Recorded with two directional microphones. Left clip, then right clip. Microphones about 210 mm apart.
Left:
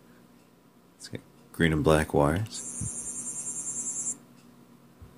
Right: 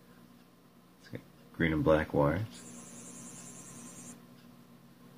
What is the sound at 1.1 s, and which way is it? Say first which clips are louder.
Speech: left 4 dB; 30° left (ahead or behind).